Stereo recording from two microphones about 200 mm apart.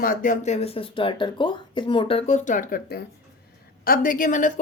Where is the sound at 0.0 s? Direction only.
45° left (ahead or behind).